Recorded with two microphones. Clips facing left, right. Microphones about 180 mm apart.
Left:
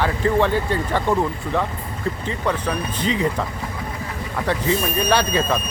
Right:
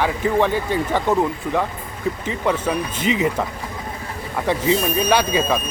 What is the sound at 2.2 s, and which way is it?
Speech, 15° right (ahead or behind).